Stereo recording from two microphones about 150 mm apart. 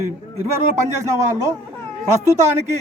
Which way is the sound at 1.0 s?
20° right (ahead or behind).